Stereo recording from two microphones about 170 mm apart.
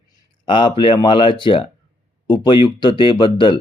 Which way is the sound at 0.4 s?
30° left (ahead or behind).